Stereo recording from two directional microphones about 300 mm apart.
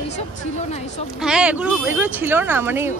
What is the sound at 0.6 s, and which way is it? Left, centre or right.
Speech, left.